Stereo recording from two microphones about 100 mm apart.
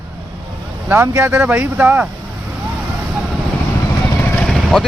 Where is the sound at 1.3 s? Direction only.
10° right (ahead or behind).